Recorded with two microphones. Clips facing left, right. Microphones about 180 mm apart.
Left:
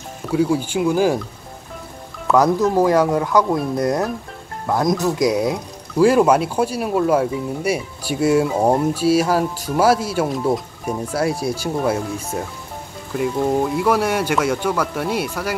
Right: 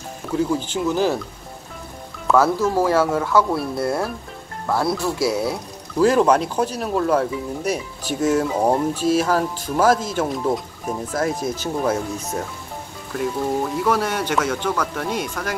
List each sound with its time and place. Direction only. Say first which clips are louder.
0.3 s speech: left 3 dB; 10° left (ahead or behind)
2.3 s speech: left 2 dB; 15° left (ahead or behind)